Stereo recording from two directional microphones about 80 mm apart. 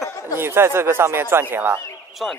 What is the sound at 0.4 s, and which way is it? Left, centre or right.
Speech, right.